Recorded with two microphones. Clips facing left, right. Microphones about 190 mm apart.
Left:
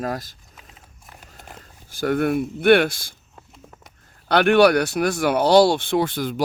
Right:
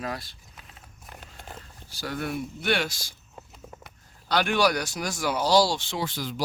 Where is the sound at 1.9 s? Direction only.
55° left (ahead or behind).